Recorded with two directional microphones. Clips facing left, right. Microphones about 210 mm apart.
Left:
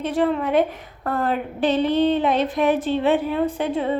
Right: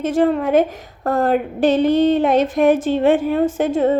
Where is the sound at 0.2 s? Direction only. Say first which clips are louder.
Right 4 dB; 45° right (ahead or behind).